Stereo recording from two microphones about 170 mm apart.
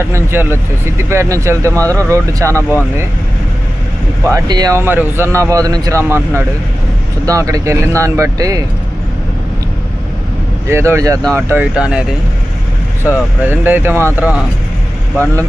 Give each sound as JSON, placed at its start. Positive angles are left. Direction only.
{"t": 0.0, "sound": "speech", "side_deg": -15}
{"t": 1.8, "sound": "speech", "side_deg": 10}
{"t": 2.0, "sound": "speech", "side_deg": -15}
{"t": 4.2, "sound": "speech", "side_deg": -15}
{"t": 10.7, "sound": "speech", "side_deg": -15}
{"t": 13.5, "sound": "speech", "side_deg": -10}